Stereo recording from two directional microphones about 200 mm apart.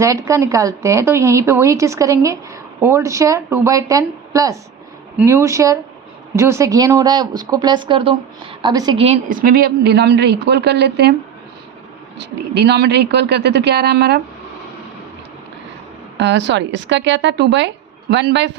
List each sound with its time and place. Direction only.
0.0 s speech: 15° right (ahead or behind)
9.0 s a woman's voice: 30° right (ahead or behind)
9.4 s speech: 50° right (ahead or behind)
12.1 s speech: 55° right (ahead or behind)
16.1 s speech: 60° right (ahead or behind)